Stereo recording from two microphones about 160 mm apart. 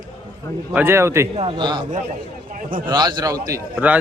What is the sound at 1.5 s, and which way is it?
Speech, 30° right (ahead or behind).